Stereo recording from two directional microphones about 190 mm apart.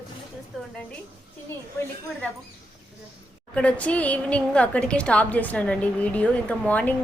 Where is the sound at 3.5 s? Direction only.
5° left (ahead or behind).